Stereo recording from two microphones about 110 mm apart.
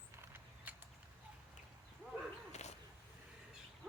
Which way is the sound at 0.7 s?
15° right (ahead or behind).